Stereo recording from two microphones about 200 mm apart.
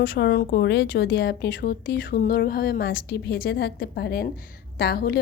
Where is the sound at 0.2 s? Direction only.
55° left (ahead or behind).